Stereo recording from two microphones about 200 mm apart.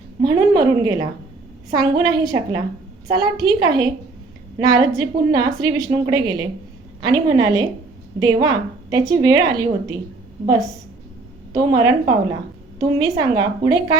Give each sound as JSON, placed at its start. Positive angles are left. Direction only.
{"t": 0.2, "sound": "a woman's voice", "side_deg": -20}
{"t": 11.5, "sound": "a woman's voice", "side_deg": -20}